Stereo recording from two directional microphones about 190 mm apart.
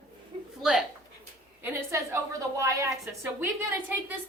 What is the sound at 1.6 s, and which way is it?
A woman's voice, 15° right (ahead or behind).